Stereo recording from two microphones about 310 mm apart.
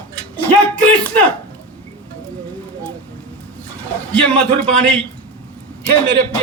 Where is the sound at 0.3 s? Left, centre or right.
Centre.